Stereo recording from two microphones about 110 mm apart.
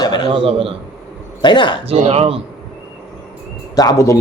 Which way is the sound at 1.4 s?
45° left (ahead or behind).